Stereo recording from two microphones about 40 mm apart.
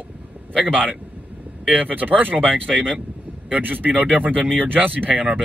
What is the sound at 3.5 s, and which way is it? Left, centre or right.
Speech, right.